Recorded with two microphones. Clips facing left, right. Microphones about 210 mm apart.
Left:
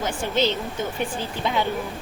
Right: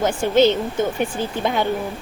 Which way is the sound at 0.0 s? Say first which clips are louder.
Right 8 dB; 50° right (ahead or behind).